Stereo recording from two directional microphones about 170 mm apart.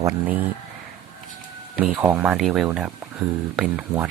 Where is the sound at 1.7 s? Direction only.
10° right (ahead or behind).